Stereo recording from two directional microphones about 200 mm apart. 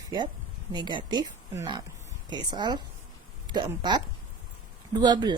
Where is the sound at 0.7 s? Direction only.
20° right (ahead or behind).